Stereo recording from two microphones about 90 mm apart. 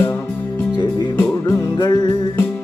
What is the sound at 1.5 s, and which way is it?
Music, 55° left (ahead or behind).